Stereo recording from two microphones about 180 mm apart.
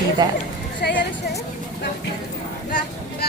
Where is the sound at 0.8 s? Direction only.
65° left (ahead or behind).